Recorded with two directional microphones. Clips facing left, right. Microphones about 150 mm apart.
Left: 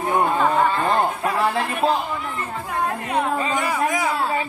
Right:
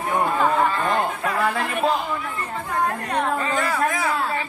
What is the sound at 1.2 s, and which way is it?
Speech, 30° left (ahead or behind).